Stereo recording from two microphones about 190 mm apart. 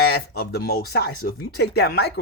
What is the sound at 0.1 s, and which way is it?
Speech, 55° left (ahead or behind).